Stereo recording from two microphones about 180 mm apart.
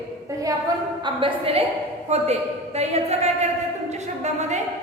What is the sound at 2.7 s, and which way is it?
Speech, 35° right (ahead or behind).